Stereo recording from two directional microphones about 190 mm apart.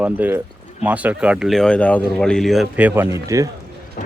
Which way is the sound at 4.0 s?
45° left (ahead or behind).